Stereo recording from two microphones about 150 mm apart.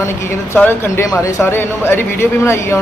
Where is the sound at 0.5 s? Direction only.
15° left (ahead or behind).